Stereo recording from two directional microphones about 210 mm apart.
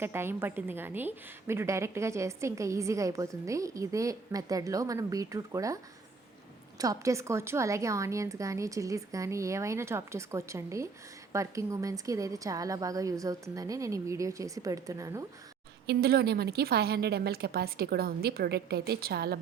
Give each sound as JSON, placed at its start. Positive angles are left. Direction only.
{"t": 0.0, "sound": "a woman's voice", "side_deg": -10}
{"t": 15.9, "sound": "a woman's voice", "side_deg": -50}